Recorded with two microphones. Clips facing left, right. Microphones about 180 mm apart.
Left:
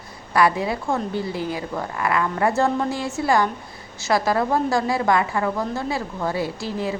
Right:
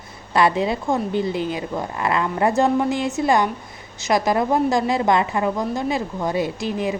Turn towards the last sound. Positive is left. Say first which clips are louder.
# right 2 dB
turn(degrees=-20)  # may be behind; listen again after turning